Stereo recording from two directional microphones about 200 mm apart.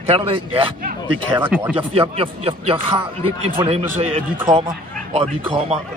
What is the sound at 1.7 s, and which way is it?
Speech, 25° right (ahead or behind).